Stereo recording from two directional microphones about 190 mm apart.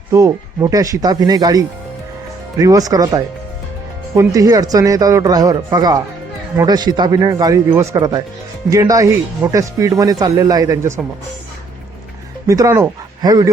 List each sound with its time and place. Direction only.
0.1 s speech: 15° right (ahead or behind)
12.5 s speech: 15° right (ahead or behind)